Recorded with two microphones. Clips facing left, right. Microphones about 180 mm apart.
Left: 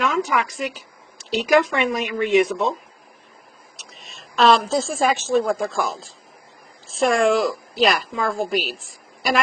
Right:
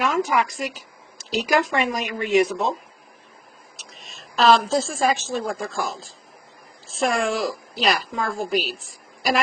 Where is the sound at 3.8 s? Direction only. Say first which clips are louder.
Left 1 dB; centre (ahead or behind).